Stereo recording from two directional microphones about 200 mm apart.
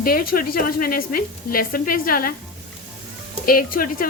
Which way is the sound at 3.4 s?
45° left (ahead or behind).